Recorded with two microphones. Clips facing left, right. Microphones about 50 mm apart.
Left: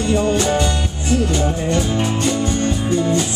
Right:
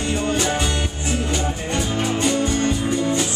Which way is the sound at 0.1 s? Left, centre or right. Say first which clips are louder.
Left 5 dB; centre.